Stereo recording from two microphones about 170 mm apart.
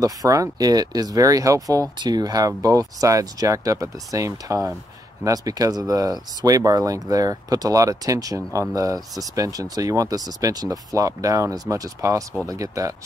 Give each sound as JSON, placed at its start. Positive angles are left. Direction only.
{"t": 0.0, "sound": "speech", "side_deg": -20}